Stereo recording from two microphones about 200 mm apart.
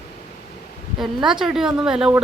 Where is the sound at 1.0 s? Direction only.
Centre (ahead or behind).